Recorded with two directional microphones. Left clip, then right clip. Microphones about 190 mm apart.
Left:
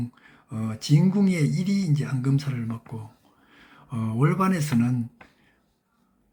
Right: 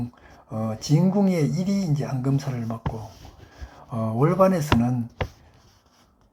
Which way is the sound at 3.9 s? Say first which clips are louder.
Right 4 dB; 35° left (ahead or behind).